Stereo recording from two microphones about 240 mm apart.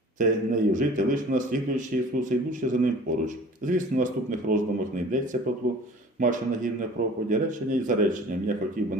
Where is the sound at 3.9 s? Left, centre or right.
Right.